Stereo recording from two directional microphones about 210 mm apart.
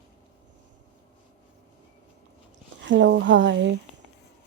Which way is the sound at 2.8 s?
60° right (ahead or behind).